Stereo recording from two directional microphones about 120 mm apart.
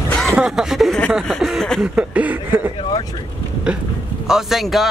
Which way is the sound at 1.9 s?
10° right (ahead or behind).